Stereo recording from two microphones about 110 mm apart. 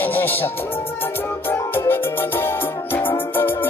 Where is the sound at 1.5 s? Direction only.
20° left (ahead or behind).